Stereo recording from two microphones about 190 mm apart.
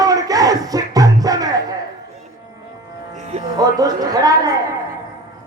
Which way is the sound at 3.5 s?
20° right (ahead or behind).